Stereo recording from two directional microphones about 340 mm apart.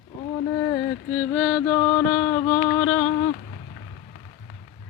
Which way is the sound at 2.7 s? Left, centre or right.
Centre.